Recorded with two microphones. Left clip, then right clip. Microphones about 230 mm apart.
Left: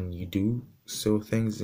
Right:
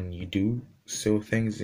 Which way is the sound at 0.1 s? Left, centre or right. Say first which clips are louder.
Right 3 dB; left.